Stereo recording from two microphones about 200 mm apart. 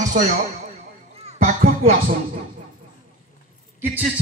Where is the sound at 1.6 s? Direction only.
45° right (ahead or behind).